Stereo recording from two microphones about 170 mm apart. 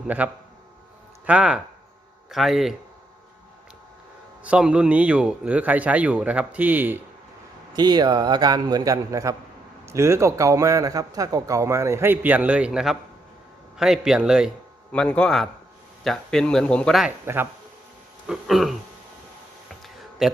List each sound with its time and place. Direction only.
0.2 s a man's voice: 10° right (ahead or behind)
4.4 s a man's voice: 5° right (ahead or behind)
7.7 s a man's voice: 25° right (ahead or behind); by 17.1 s centre (ahead or behind)
17.1 s a man's voice: 15° right (ahead or behind)
18.3 s a man's voice: centre (ahead or behind)
19.8 s a sound: centre (ahead or behind)